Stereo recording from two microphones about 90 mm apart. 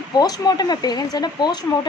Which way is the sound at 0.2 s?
45° left (ahead or behind).